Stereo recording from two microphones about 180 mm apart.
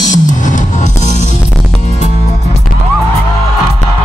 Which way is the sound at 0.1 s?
45° left (ahead or behind).